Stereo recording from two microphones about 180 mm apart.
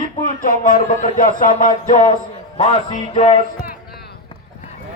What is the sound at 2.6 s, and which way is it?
Music, 35° left (ahead or behind).